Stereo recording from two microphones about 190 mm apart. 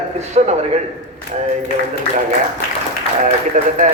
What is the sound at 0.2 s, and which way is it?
Speech, 35° right (ahead or behind).